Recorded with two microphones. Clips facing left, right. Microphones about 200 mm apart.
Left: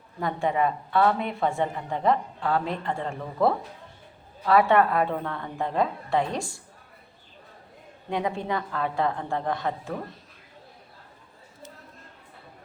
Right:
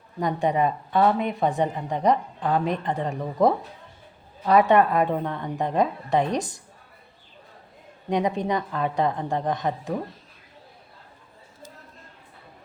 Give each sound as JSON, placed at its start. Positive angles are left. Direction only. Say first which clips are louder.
{"t": 0.2, "sound": "a woman's voice", "louder": "right 2 dB", "side_deg": -20}
{"t": 8.1, "sound": "a woman's voice", "louder": "right 4 dB", "side_deg": -20}